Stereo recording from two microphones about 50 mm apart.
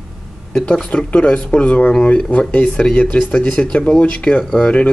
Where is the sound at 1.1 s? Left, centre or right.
Left.